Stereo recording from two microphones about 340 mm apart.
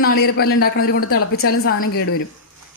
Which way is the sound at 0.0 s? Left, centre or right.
Left.